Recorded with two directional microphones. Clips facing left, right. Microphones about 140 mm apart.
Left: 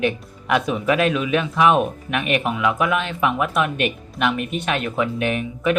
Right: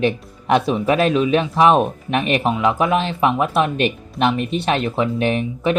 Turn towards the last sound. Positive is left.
turn(degrees=-30)  # may be behind; listen again after turning